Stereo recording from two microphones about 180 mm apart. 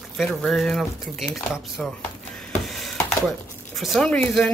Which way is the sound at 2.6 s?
Centre (ahead or behind).